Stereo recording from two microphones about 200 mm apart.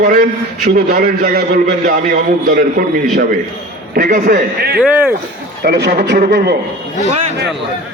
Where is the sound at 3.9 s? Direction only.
45° right (ahead or behind).